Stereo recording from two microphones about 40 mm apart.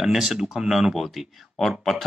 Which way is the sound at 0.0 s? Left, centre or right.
Centre.